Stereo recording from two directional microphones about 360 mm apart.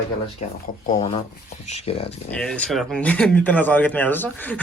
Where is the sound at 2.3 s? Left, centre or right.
Centre.